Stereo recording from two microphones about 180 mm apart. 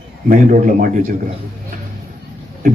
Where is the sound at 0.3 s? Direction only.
45° right (ahead or behind).